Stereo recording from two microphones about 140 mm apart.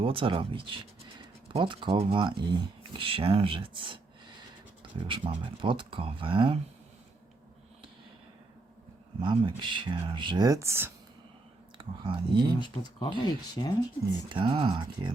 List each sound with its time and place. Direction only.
0.0 s speech: 40° right (ahead or behind)
9.2 s speech: 35° right (ahead or behind); by 10.9 s 15° right (ahead or behind)
11.8 s speech: 35° right (ahead or behind)
12.5 s speech: 35° left (ahead or behind)
14.3 s speech: 35° right (ahead or behind)